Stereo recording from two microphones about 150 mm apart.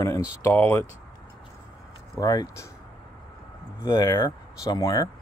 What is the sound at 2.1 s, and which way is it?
Speech, 25° left (ahead or behind).